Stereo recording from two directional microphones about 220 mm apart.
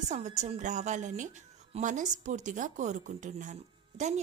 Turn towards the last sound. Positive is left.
turn(degrees=-30)  # may be behind; listen again after turning